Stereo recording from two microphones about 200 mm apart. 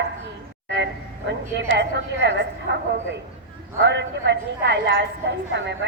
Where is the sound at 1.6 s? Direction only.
60° right (ahead or behind).